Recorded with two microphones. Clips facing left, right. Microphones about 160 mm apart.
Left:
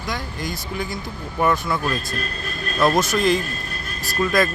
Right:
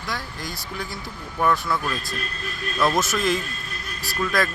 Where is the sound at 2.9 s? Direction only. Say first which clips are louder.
Left 4 dB; centre (ahead or behind).